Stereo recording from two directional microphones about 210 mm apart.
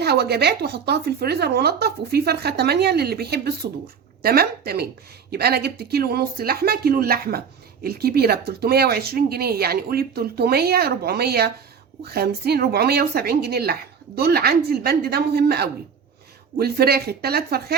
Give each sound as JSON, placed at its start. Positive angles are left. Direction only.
{"t": 0.0, "sound": "speech", "side_deg": -50}